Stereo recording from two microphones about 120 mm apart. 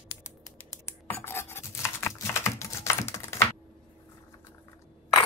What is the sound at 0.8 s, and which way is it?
Computer keyboard, 20° left (ahead or behind).